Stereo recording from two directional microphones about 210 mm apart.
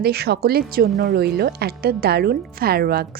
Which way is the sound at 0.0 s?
50° right (ahead or behind).